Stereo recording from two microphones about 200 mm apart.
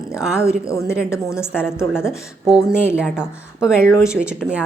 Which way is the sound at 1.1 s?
15° left (ahead or behind).